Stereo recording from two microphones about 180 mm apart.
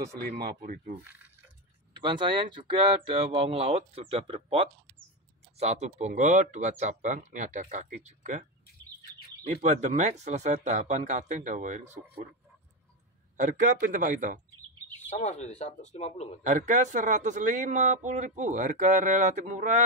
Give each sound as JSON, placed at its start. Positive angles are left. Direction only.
{"t": 0.4, "sound": "speech", "side_deg": -55}
{"t": 2.0, "sound": "speech", "side_deg": -25}
{"t": 13.4, "sound": "speech", "side_deg": -45}
{"t": 15.0, "sound": "speech", "side_deg": 40}
{"t": 16.4, "sound": "speech", "side_deg": -40}